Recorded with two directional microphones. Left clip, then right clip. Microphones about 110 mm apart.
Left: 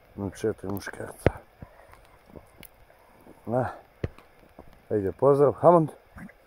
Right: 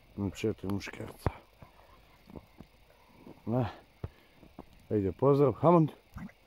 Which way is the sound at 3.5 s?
25° right (ahead or behind).